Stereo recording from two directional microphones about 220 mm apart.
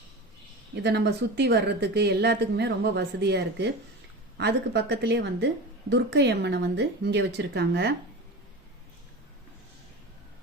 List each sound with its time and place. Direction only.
0.8 s speech: 50° right (ahead or behind)